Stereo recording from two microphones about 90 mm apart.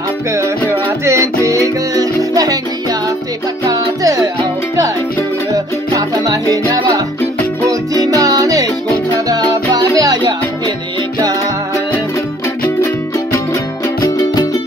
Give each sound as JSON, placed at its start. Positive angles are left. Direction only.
{"t": 1.0, "sound": "music", "side_deg": -35}
{"t": 5.9, "sound": "music", "side_deg": -40}
{"t": 7.9, "sound": "music", "side_deg": -45}
{"t": 14.0, "sound": "music", "side_deg": 45}